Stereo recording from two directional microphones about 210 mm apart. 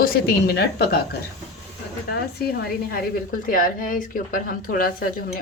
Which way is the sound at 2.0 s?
50° left (ahead or behind).